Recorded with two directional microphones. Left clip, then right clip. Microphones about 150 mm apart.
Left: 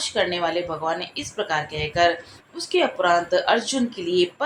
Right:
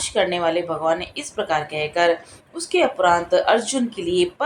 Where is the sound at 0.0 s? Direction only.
45° right (ahead or behind).